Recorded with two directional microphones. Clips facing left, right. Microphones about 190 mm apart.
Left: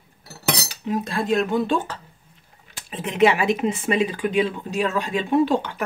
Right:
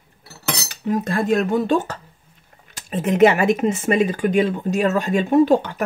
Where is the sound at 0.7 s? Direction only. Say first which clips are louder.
Right 4 dB; 50° right (ahead or behind).